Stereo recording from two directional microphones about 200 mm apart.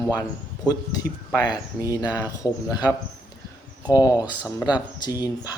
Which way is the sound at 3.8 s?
20° left (ahead or behind).